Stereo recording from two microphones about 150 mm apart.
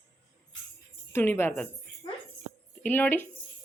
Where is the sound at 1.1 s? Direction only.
15° left (ahead or behind).